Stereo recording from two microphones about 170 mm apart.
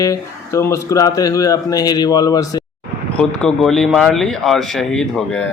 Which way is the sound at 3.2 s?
5° left (ahead or behind).